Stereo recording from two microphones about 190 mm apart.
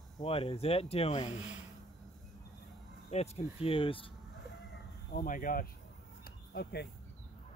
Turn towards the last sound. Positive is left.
turn(degrees=60)  # may be behind; listen again after turning